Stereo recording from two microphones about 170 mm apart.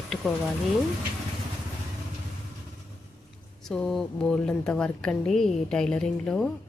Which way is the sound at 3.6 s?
5° left (ahead or behind).